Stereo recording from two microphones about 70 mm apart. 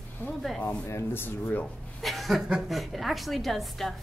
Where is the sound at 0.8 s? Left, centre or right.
Left.